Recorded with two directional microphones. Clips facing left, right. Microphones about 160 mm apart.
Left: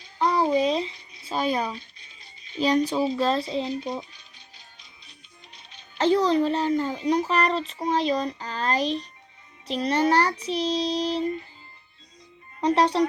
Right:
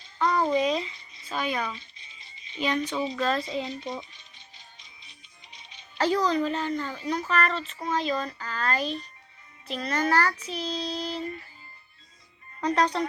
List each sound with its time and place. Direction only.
0.6 s a sound: 35° left (ahead or behind)
1.7 s rattle: centre (ahead or behind)
2.6 s child singing: 35° left (ahead or behind)
3.4 s music: centre (ahead or behind)
6.0 s child singing: 30° left (ahead or behind)
12.5 s speech: 30° left (ahead or behind)